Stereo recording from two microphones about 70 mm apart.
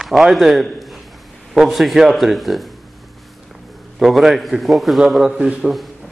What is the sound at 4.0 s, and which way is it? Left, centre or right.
A man's voice, centre.